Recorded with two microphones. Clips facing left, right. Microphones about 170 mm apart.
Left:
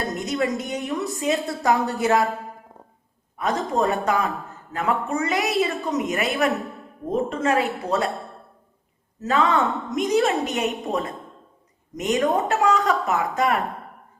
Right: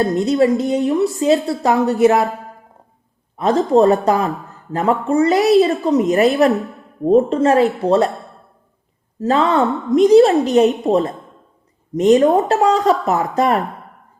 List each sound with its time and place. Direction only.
0.0 s a woman's voice: 30° right (ahead or behind)
1.5 s a woman's voice: 20° right (ahead or behind)
3.3 s a woman's voice: 35° right (ahead or behind)
9.1 s a woman's voice: 35° right (ahead or behind)